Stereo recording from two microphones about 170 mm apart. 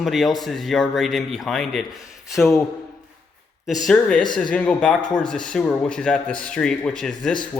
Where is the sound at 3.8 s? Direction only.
5° left (ahead or behind).